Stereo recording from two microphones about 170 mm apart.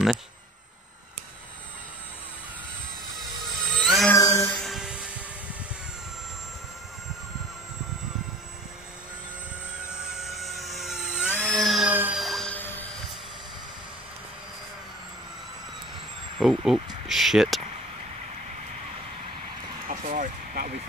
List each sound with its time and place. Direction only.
3.6 s a sound: centre (ahead or behind)
4.1 s music: 15° left (ahead or behind)
4.6 s music: centre (ahead or behind)
10.1 s helicopter: centre (ahead or behind)
11.3 s music: 5° left (ahead or behind)
16.3 s vehicle: 5° right (ahead or behind)
17.1 s speech: centre (ahead or behind)
19.9 s vehicle: 50° right (ahead or behind)